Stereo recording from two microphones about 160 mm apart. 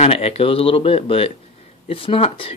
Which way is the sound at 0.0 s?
40° left (ahead or behind).